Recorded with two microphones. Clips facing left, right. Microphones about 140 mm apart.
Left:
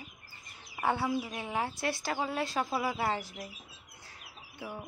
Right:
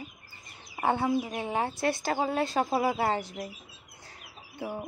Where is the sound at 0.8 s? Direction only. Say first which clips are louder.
Right 4 dB; 25° right (ahead or behind).